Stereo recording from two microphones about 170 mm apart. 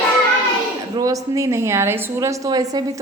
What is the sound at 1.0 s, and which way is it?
A woman's voice, 20° right (ahead or behind).